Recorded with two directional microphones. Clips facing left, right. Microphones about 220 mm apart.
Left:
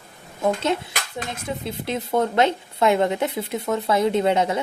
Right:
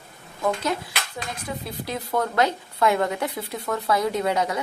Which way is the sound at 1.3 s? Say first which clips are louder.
Left 3 dB; 25° left (ahead or behind).